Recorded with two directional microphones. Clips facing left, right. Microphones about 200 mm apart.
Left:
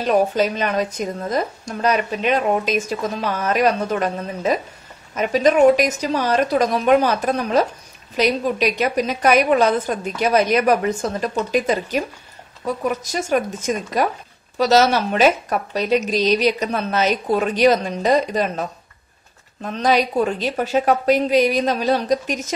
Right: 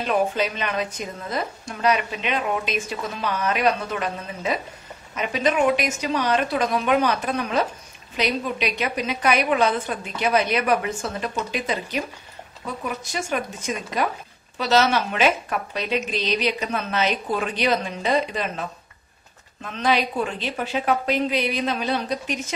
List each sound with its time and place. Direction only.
0.0 s a woman's voice: 40° left (ahead or behind)